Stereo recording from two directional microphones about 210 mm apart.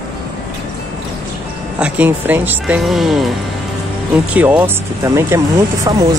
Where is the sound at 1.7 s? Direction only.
5° right (ahead or behind).